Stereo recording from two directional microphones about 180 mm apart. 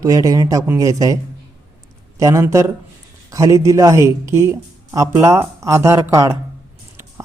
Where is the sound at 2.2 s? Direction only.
15° right (ahead or behind).